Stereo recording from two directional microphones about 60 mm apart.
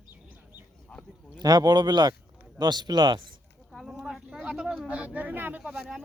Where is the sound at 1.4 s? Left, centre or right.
Right.